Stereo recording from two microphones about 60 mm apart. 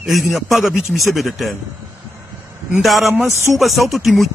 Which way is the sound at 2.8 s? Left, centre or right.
Centre.